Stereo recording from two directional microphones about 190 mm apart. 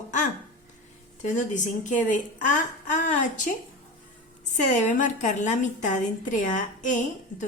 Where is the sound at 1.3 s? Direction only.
40° left (ahead or behind).